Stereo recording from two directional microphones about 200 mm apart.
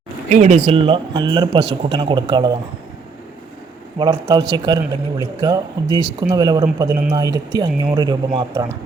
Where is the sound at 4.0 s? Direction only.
20° right (ahead or behind).